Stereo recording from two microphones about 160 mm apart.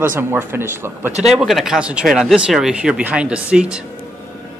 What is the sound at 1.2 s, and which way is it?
Speech, centre (ahead or behind).